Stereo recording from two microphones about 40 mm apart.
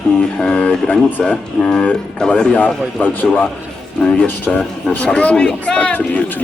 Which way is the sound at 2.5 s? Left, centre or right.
Left.